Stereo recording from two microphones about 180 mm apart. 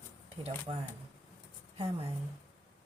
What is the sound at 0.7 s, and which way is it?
Speech, 30° right (ahead or behind).